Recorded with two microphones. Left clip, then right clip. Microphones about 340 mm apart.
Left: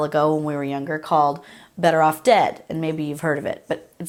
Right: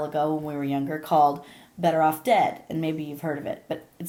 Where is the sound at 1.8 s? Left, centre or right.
Left.